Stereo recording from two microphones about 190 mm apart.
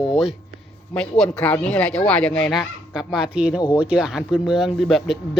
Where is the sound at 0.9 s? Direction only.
5° left (ahead or behind).